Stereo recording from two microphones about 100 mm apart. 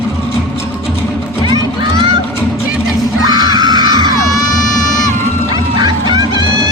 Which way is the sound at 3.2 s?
40° right (ahead or behind).